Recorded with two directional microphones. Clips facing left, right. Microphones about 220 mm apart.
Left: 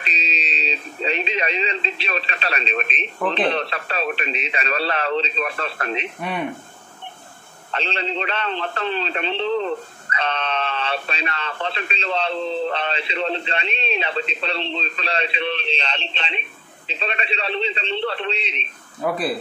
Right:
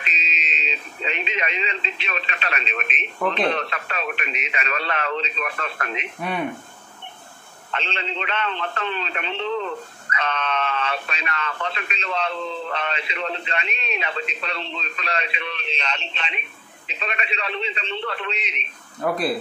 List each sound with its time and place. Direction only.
0.0 s speech: 35° left (ahead or behind)
7.7 s speech: 35° left (ahead or behind)
18.9 s speech: centre (ahead or behind)